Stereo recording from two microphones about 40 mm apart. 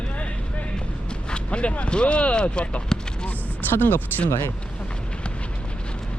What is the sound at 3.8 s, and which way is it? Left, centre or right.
Speech, left.